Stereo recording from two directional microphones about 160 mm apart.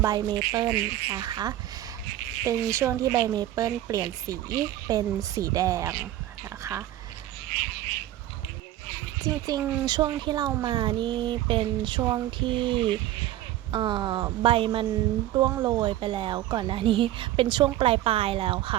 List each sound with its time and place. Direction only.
0.0 s speech: 25° right (ahead or behind)
6.6 s a sound: 15° right (ahead or behind)
9.2 s speech: 25° right (ahead or behind)
15.4 s speech: 25° right (ahead or behind)